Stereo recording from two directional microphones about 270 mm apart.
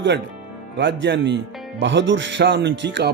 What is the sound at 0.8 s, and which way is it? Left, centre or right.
Music, right.